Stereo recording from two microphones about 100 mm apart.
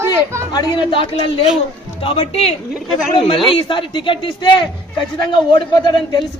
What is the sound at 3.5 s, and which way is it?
Speech, 55° left (ahead or behind).